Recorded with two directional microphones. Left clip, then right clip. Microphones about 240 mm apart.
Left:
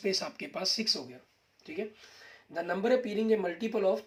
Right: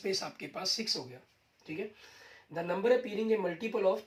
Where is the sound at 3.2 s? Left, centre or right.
Left.